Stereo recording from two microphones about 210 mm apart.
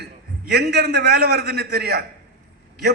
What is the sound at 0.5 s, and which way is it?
A man's voice, 50° right (ahead or behind).